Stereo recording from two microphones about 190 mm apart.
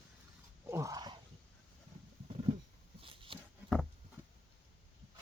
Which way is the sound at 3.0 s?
30° right (ahead or behind).